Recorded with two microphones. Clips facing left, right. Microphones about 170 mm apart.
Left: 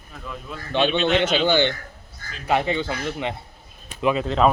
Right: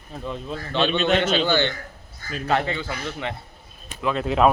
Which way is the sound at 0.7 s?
15° left (ahead or behind).